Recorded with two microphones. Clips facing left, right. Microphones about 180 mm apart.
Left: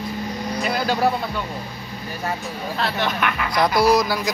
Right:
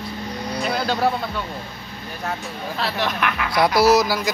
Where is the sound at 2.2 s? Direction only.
Centre (ahead or behind).